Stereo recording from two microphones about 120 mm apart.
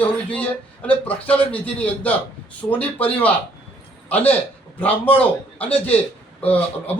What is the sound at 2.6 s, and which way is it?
Speech, 10° left (ahead or behind).